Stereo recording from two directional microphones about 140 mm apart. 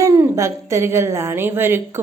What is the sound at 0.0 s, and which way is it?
A woman's voice, 20° right (ahead or behind).